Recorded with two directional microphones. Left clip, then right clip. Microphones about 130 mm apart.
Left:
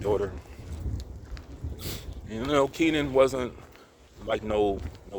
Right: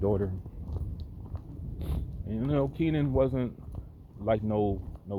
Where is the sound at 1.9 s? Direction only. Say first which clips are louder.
Left 1 dB; 40° left (ahead or behind).